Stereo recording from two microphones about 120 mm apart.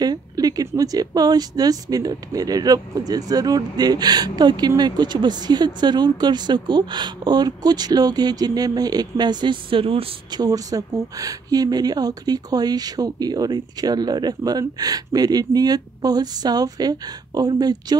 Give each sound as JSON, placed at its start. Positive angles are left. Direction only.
{"t": 0.0, "sound": "speech", "side_deg": -35}
{"t": 10.4, "sound": "speech", "side_deg": -30}